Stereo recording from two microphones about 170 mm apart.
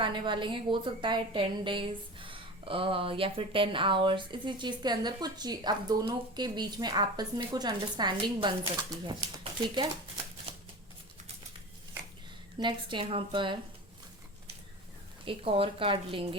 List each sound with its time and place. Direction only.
0.0 s a woman's voice: 30° right (ahead or behind)
12.5 s a woman's voice: 30° right (ahead or behind)
15.2 s speech: 30° right (ahead or behind)